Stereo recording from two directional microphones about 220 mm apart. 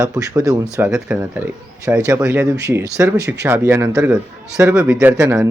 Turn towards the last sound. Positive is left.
turn(degrees=-15)  # may be behind; listen again after turning